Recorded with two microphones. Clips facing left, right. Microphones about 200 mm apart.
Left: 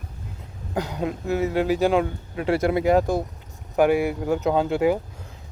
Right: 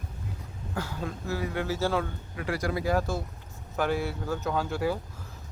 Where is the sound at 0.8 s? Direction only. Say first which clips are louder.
Left 8 dB; 20° left (ahead or behind).